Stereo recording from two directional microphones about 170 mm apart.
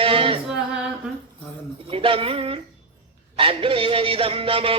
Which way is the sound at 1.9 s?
30° right (ahead or behind).